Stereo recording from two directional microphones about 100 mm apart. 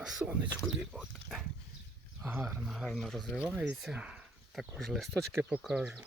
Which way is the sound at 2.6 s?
5° right (ahead or behind).